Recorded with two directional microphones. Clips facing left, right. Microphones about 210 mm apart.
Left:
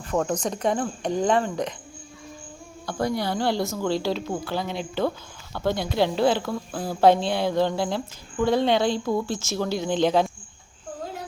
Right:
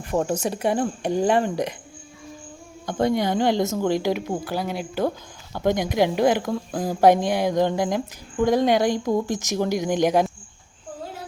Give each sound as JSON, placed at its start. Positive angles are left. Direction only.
{"t": 0.0, "sound": "a woman's voice", "side_deg": -15}
{"t": 2.8, "sound": "a woman's voice", "side_deg": -20}